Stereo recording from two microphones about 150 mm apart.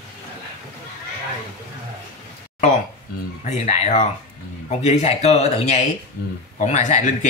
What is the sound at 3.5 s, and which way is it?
Speech, 45° left (ahead or behind).